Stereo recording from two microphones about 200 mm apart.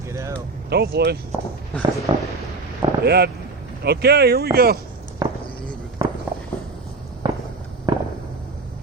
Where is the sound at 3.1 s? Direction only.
55° right (ahead or behind).